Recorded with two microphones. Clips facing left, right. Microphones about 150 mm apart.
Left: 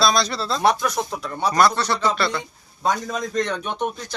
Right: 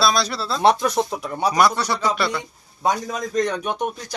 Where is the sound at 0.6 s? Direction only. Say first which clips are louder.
Right 3 dB; 30° right (ahead or behind).